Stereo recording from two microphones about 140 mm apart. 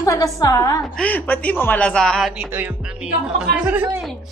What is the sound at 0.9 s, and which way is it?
A woman's voice, 10° left (ahead or behind).